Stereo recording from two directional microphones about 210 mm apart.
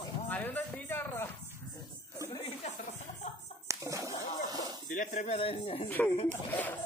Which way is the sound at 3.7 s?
15° right (ahead or behind).